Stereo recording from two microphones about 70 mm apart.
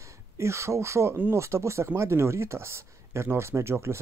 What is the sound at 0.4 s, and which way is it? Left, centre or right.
Speech, right.